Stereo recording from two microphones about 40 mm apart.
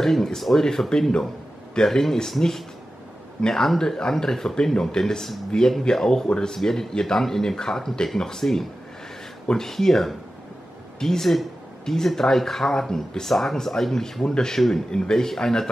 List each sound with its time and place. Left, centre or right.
0.0 s speech: centre
3.3 s speech: centre